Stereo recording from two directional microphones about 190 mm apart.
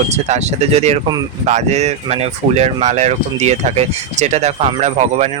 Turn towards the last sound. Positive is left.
turn(degrees=-35)  # may be behind; listen again after turning